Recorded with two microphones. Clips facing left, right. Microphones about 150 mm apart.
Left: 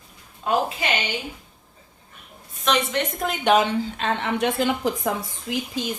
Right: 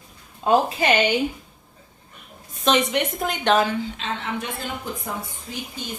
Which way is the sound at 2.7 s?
30° right (ahead or behind).